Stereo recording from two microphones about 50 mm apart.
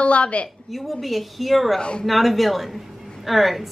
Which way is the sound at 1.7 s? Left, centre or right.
Centre.